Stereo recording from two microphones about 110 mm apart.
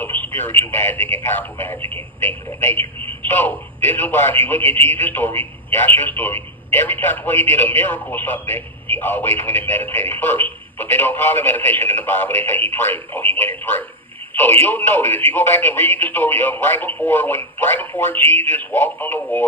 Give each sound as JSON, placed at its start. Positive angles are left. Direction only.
{"t": 0.0, "sound": "radio", "side_deg": 20}
{"t": 0.6, "sound": "a man's voice", "side_deg": 20}